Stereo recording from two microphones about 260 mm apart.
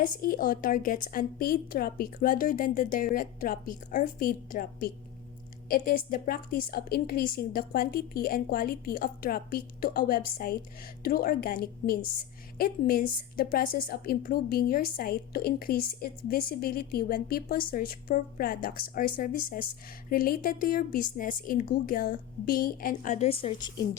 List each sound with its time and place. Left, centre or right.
0.0 s a woman's voice: left; by 23.8 s centre